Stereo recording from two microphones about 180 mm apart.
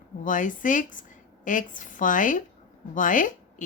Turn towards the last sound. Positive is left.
turn(degrees=45)  # may be behind; listen again after turning